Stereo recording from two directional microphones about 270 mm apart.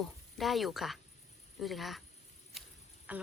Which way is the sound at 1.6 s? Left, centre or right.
Centre.